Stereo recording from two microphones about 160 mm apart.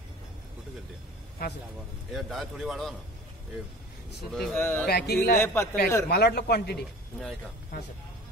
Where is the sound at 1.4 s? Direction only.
70° left (ahead or behind).